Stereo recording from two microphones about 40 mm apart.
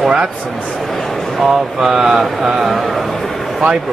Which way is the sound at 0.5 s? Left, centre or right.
Left.